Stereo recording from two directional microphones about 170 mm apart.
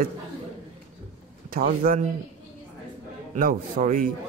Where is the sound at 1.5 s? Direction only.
55° right (ahead or behind).